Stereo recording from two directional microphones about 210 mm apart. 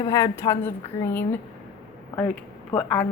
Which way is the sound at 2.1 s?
10° left (ahead or behind).